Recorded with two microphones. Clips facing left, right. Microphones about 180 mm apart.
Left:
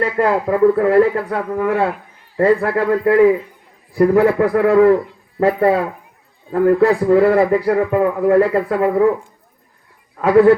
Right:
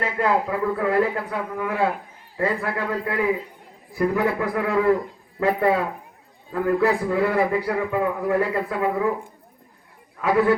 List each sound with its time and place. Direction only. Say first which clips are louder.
0.2 s a man's voice: left 8 dB; 45° left (ahead or behind)
10.2 s a man's voice: left 9 dB; 45° left (ahead or behind)